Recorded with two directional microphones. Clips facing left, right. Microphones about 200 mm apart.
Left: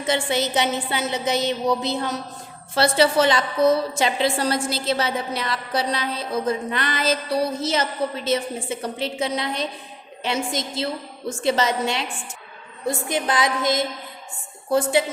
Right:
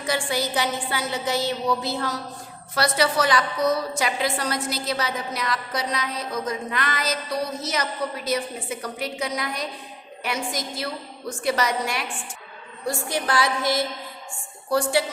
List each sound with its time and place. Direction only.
0.0 s a woman's voice: 25° left (ahead or behind)